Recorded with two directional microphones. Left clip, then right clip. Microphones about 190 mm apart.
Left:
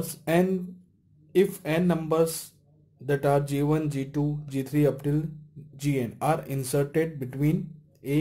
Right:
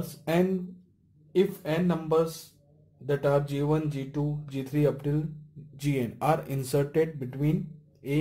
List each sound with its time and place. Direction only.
0.2 s speech: 20° left (ahead or behind)
5.8 s speech: 10° left (ahead or behind)
6.2 s speech: centre (ahead or behind)
7.2 s speech: 25° left (ahead or behind)